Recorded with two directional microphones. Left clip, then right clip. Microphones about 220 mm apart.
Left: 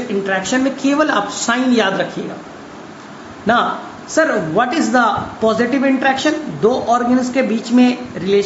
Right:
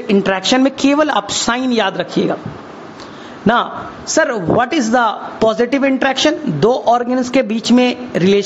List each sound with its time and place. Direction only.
0.1 s a man's voice: 50° right (ahead or behind)
4.1 s a man's voice: 50° right (ahead or behind)